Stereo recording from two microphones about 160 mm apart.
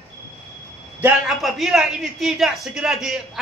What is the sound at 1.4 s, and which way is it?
A man's voice, centre (ahead or behind).